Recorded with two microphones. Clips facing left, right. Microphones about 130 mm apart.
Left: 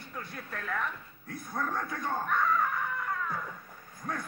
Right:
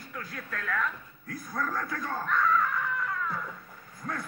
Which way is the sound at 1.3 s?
25° left (ahead or behind).